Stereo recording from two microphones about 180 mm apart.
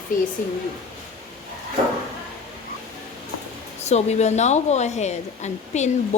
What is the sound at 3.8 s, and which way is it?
A woman's voice, 35° left (ahead or behind).